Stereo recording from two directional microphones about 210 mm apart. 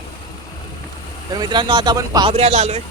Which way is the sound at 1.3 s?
20° right (ahead or behind).